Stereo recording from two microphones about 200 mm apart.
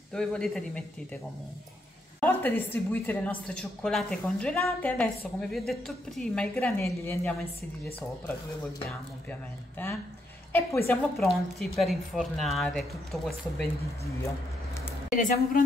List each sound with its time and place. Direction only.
0.1 s a woman's voice: 5° left (ahead or behind)
9.3 s a woman's voice: 10° left (ahead or behind)
15.1 s a woman's voice: 45° left (ahead or behind)